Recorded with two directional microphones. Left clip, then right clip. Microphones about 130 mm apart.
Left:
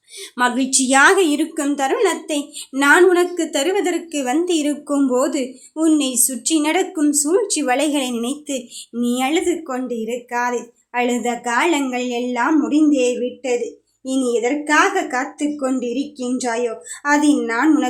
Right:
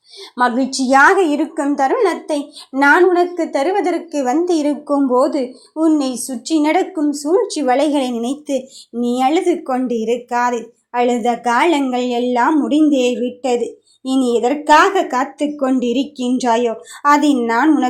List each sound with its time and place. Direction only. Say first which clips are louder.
0.3 s a woman's voice: right 2 dB; 5° right (ahead or behind)
1.7 s a woman's voice: right 3 dB; 5° right (ahead or behind); by 17.7 s 25° right (ahead or behind)